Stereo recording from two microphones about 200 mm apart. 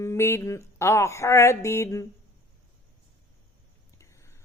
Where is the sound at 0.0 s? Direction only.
15° left (ahead or behind).